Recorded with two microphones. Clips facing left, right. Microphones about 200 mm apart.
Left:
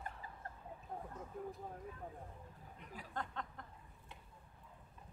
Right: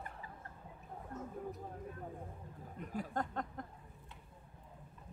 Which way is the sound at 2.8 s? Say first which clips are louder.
Right 7 dB; 45° right (ahead or behind).